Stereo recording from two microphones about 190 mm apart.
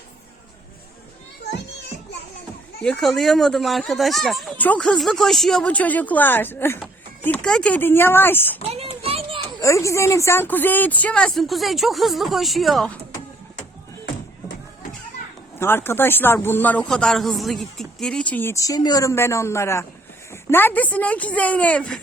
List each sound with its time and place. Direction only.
2.8 s speech: centre (ahead or behind)
8.6 s children playing: 30° right (ahead or behind)
9.6 s speech: 15° left (ahead or behind)
15.5 s speech: 10° left (ahead or behind)